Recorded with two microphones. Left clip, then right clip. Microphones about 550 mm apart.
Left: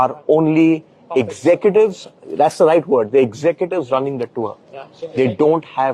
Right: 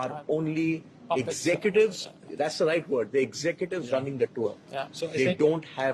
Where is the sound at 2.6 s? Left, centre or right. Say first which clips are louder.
Left 11 dB; left.